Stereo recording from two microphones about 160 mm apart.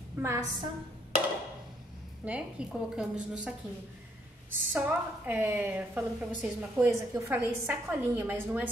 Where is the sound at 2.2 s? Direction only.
5° right (ahead or behind).